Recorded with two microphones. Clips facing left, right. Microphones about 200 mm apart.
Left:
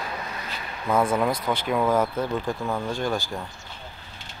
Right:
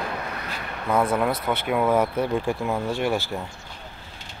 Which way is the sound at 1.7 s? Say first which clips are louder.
Right 1 dB; 10° right (ahead or behind).